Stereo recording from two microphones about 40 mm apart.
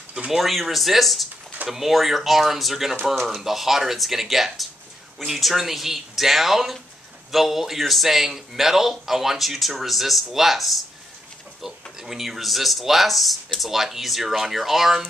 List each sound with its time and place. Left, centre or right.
0.3 s a man's voice: centre